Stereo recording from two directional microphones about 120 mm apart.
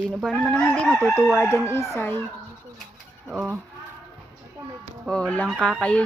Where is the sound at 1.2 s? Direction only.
15° left (ahead or behind).